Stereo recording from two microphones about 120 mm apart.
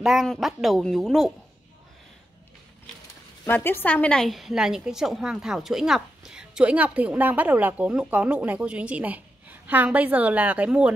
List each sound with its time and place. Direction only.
0.0 s speech: 5° right (ahead or behind)
3.4 s a woman's voice: 20° left (ahead or behind); by 10.9 s 10° right (ahead or behind)